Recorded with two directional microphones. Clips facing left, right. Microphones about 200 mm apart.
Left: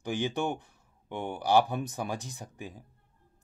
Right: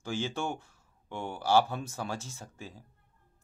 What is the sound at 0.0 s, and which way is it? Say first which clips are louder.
Speech: left 3 dB; 15° left (ahead or behind).